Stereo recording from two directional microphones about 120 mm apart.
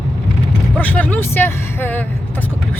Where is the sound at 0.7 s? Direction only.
15° left (ahead or behind).